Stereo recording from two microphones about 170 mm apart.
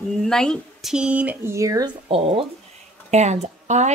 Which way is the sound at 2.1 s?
35° right (ahead or behind).